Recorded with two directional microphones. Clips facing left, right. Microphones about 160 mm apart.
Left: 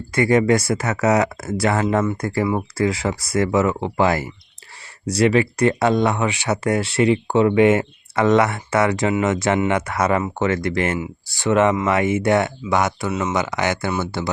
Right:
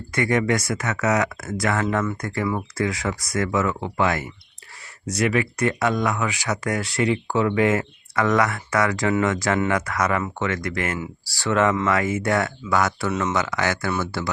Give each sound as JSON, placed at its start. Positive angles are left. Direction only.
{"t": 0.1, "sound": "speech", "side_deg": 30}
{"t": 13.1, "sound": "speech", "side_deg": 10}